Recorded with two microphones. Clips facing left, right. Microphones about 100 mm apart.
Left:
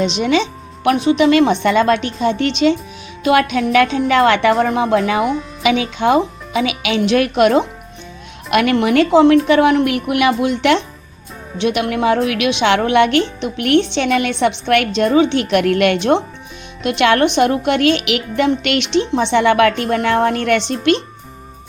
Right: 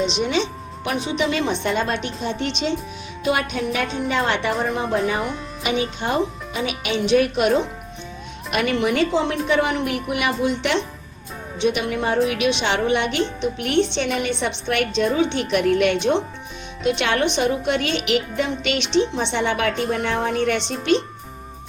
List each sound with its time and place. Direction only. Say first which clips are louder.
0.0 s a woman's voice: left 5 dB; 85° left
0.9 s a woman's voice: left 10 dB; 65° left (ahead or behind); by 7.6 s 85° left
8.4 s a woman's voice: left 6 dB; 70° left (ahead or behind)
12.3 s a woman's voice: left 6 dB; 90° left
13.4 s a woman's voice: left 5 dB; 75° left (ahead or behind)